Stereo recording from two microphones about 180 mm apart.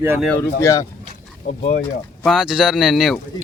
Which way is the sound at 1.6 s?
55° left (ahead or behind).